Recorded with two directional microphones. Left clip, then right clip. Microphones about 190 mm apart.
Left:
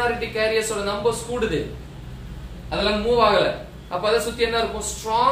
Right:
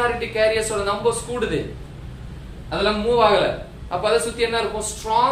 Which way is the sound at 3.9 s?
20° right (ahead or behind).